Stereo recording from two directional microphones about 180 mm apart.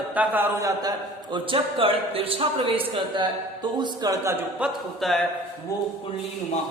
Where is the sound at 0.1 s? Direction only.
10° right (ahead or behind).